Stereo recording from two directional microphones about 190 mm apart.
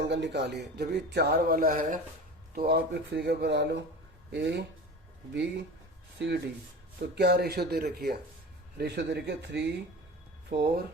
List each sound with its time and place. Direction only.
0.0 s speech: 65° right (ahead or behind)